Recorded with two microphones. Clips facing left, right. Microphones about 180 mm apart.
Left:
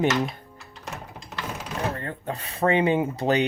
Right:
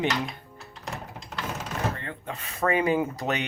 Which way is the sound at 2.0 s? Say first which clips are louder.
Left 4 dB; 40° left (ahead or behind).